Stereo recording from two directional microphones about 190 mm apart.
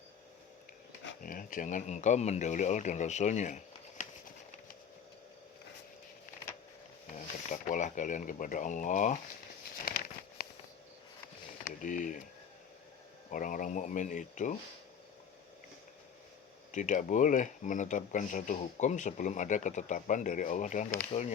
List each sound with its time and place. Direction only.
1.2 s speech: 45° left (ahead or behind)
7.1 s speech: 40° left (ahead or behind)
9.9 s crumpling: 50° left (ahead or behind)
10.4 s walk: 55° left (ahead or behind)
11.8 s speech: 40° left (ahead or behind)
13.3 s speech: 45° left (ahead or behind)
16.7 s speech: 40° left (ahead or behind)